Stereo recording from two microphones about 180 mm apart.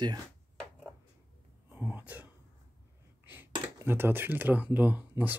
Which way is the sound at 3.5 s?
15° right (ahead or behind).